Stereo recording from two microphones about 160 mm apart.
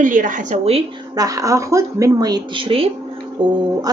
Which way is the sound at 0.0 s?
55° right (ahead or behind).